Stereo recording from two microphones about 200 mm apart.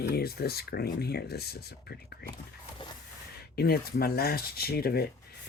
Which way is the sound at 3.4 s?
50° left (ahead or behind).